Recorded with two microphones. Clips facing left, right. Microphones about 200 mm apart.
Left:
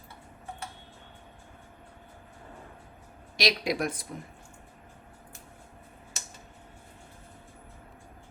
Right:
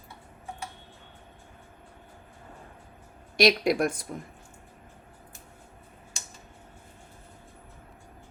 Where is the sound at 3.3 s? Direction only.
50° right (ahead or behind).